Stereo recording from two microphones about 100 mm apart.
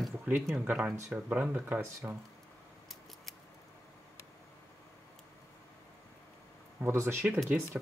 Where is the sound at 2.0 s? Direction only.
25° right (ahead or behind).